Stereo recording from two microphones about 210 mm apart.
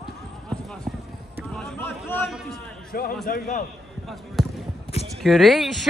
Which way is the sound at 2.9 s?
45° left (ahead or behind).